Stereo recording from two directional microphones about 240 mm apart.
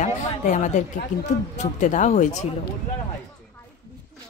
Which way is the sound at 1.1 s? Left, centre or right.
Left.